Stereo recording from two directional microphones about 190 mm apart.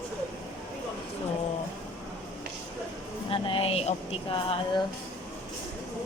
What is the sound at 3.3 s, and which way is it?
Speech, 25° left (ahead or behind).